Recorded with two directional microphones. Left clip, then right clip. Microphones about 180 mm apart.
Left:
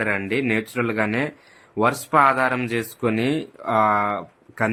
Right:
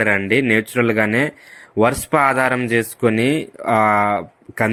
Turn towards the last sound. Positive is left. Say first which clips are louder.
# right 4 dB
turn(degrees=-20)  # may be behind; listen again after turning